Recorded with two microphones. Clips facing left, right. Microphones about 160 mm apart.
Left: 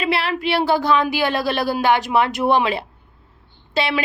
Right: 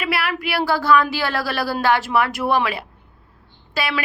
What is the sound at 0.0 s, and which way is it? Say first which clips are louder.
A woman's voice: left 3 dB; 25° left (ahead or behind).